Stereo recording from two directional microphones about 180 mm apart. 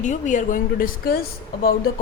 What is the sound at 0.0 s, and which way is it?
A woman's voice, 45° left (ahead or behind).